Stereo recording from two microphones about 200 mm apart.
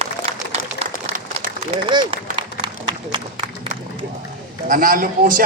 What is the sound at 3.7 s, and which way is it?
Music, 45° right (ahead or behind).